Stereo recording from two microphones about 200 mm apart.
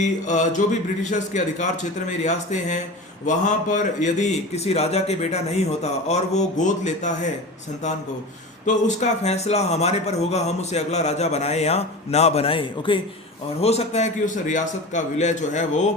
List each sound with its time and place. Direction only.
0.0 s speech: 35° left (ahead or behind)
8.6 s speech: 35° left (ahead or behind)